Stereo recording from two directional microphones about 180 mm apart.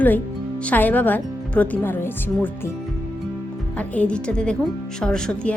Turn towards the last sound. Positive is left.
turn(degrees=5)  # may be behind; listen again after turning